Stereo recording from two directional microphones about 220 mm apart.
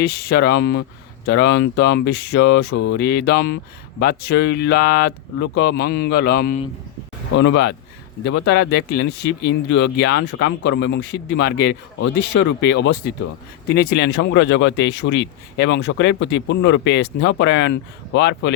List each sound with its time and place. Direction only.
0.0 s speech: 45° left (ahead or behind)
7.3 s speech: 55° left (ahead or behind)